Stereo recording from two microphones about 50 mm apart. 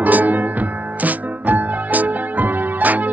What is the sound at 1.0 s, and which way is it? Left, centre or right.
Music, right.